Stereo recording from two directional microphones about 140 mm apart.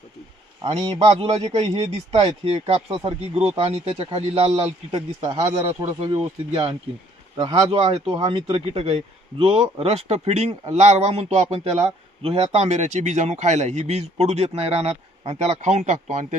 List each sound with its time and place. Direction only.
0.6 s speech: 30° right (ahead or behind)
0.9 s a man's voice: 50° right (ahead or behind)
4.9 s speech: 35° right (ahead or behind)
5.4 s speech: 20° right (ahead or behind)
6.1 s speech: 40° right (ahead or behind)
8.1 s a man's voice: 35° right (ahead or behind); by 16.4 s 60° right (ahead or behind)